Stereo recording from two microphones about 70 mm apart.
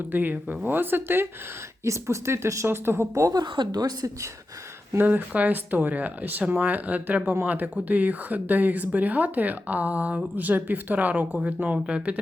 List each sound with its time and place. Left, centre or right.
0.1 s speech: right
1.8 s speech: right
3.2 s speech: right
4.9 s speech: right